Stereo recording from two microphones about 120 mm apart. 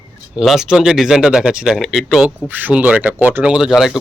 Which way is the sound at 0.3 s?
5° right (ahead or behind).